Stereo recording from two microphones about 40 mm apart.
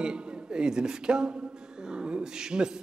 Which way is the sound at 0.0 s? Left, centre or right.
Right.